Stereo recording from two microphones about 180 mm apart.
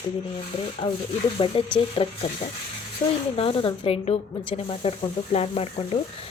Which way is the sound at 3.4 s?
30° left (ahead or behind).